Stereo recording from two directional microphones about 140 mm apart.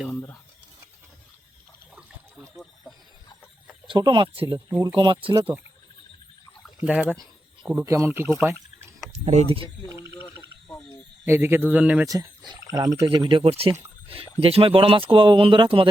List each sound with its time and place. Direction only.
0.1 s speech: 20° left (ahead or behind)
3.8 s speech: 35° right (ahead or behind)
4.5 s speech: 20° right (ahead or behind)
4.9 s speech: 35° right (ahead or behind)
6.7 s speech: 10° right (ahead or behind)
9.1 s speech: 55° right (ahead or behind)
9.8 s a sound: centre (ahead or behind)
11.3 s speech: 15° right (ahead or behind)
12.0 s speech: 25° right (ahead or behind)
13.1 s speech: 35° right (ahead or behind)